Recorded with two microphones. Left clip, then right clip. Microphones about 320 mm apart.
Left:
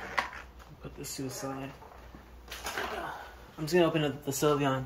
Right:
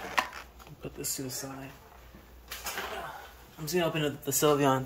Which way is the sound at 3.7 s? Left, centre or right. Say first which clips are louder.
Left 3 dB; centre.